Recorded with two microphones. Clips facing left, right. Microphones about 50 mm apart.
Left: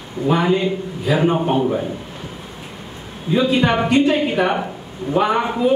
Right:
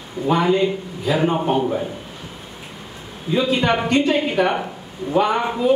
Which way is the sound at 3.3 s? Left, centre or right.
Centre.